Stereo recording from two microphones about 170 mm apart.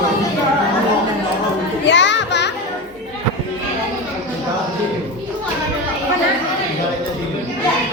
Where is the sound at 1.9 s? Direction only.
90° left.